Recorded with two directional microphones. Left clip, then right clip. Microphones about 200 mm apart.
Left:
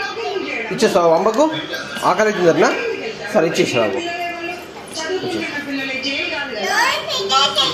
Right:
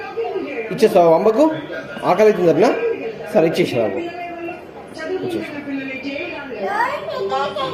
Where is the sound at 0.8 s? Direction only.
15° right (ahead or behind).